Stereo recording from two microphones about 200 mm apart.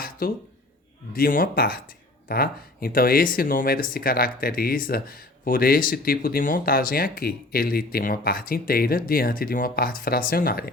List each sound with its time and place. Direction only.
0.2 s speech: 45° left (ahead or behind)